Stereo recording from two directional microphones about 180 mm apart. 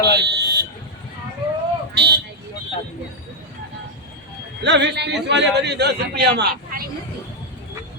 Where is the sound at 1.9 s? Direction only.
65° right (ahead or behind).